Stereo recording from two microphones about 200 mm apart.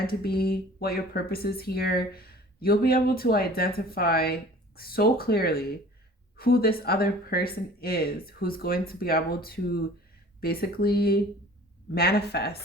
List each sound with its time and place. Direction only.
0.1 s speech: 50° left (ahead or behind)